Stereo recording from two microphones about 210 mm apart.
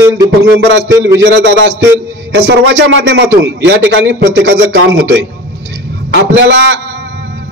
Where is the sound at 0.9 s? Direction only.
15° right (ahead or behind).